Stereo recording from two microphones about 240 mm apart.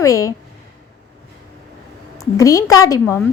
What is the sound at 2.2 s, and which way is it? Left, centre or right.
Speech, centre.